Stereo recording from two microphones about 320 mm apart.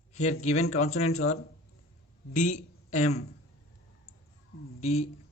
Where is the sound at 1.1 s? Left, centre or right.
Left.